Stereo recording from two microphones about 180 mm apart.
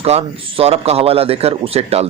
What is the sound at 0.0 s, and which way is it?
A man's voice, 35° right (ahead or behind).